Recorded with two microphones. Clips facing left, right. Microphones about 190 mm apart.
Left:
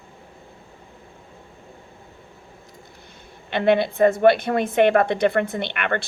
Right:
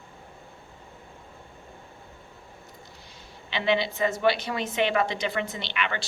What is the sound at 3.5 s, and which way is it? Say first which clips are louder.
A woman's voice: left 7 dB; 55° left (ahead or behind).